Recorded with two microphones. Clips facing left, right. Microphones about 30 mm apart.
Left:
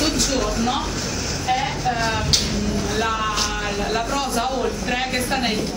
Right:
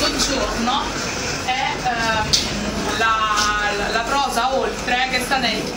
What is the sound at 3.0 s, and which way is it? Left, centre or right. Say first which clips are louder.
A woman's voice: right 6 dB; right.